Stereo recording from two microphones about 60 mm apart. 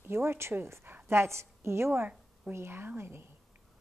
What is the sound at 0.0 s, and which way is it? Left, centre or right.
A woman's voice, right.